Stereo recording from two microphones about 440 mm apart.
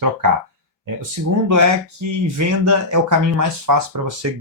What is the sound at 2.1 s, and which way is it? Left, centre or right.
Speech, right.